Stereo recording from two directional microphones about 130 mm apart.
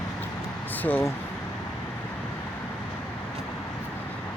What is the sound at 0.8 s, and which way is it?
Speech, 15° left (ahead or behind).